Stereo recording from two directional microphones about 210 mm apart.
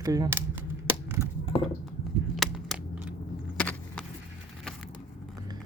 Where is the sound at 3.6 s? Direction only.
5° left (ahead or behind).